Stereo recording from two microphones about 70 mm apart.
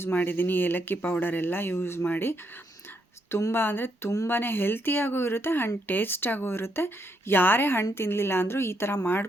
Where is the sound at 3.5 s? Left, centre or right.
Left.